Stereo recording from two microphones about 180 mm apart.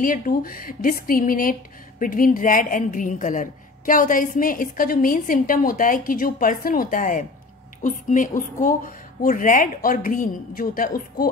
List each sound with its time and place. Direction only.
0.0 s speech: 50° left (ahead or behind)